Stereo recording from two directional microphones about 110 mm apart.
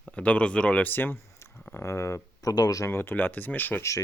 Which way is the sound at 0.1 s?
10° left (ahead or behind).